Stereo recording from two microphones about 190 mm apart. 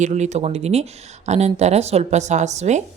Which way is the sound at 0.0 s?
40° right (ahead or behind).